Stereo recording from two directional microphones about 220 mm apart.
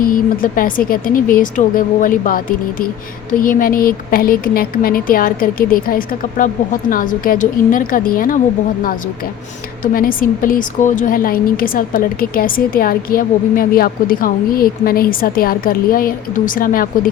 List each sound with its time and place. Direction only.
0.0 s a woman's voice: 40° left (ahead or behind)
9.8 s a woman's voice: 40° left (ahead or behind)